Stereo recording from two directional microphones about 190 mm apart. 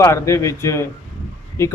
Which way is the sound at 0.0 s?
15° left (ahead or behind).